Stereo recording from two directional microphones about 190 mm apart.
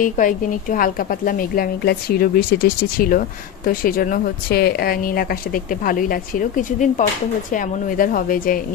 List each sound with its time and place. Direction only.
0.0 s speech: 45° left (ahead or behind)